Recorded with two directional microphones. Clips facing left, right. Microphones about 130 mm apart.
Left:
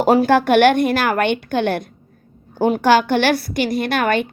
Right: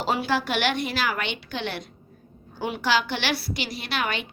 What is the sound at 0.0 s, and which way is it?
A woman's voice, 50° left (ahead or behind).